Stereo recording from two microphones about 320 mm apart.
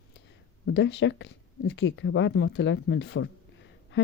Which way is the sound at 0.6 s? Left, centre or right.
Left.